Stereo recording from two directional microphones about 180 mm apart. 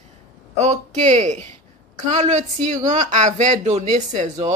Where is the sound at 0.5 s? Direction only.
40° right (ahead or behind).